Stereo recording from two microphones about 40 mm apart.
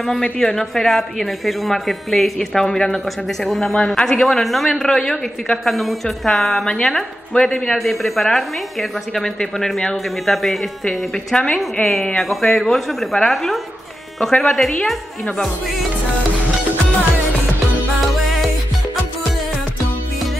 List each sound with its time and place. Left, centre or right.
0.4 s speech: centre
3.7 s speech: centre
4.3 s speech: centre
4.8 s speech: centre
5.7 s speech: centre
6.6 s a woman's voice: left
7.7 s speech: centre
10.3 s speech: centre